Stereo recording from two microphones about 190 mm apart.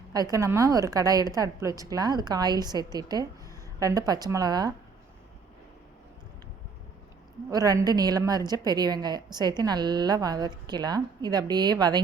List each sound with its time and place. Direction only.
0.1 s a woman's voice: 20° right (ahead or behind)
7.5 s a woman's voice: 20° right (ahead or behind)